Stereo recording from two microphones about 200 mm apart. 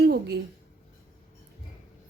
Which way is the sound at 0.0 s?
55° right (ahead or behind).